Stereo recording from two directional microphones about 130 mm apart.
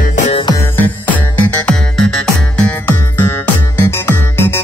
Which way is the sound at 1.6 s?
5° left (ahead or behind).